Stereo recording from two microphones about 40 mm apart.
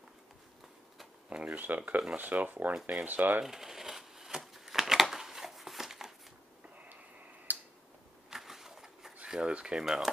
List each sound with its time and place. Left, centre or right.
1.3 s speech: right
2.7 s speech: centre
3.1 s speech: right
3.4 s shuffling cards: centre
7.5 s tick-tock: right
8.3 s a sound: centre
9.2 s speech: right